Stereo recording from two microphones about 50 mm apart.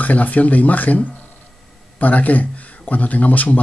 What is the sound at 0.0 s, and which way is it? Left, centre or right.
A man's voice, left.